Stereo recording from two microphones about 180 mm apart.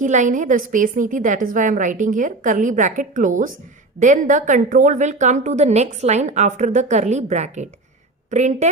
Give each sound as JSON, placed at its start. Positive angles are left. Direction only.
{"t": 0.0, "sound": "a woman's voice", "side_deg": -45}